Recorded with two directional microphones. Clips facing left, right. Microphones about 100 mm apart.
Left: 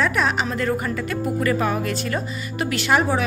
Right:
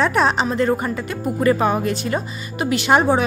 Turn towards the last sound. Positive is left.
turn(degrees=-25)  # may be behind; listen again after turning